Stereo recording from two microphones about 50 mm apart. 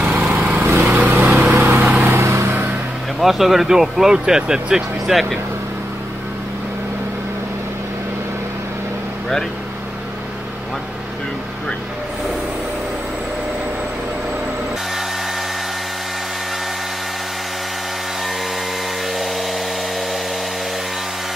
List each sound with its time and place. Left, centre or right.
0.0 s lawn mower: right
1.0 s vehicle: right
2.0 s vehicle: right
3.2 s speech: centre